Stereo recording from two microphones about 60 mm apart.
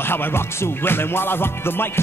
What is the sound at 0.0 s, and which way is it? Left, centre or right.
Music, left.